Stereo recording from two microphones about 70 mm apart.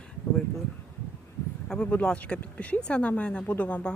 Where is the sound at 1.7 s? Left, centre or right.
Centre.